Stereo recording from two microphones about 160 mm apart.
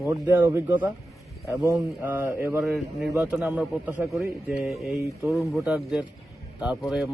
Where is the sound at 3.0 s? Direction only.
Centre (ahead or behind).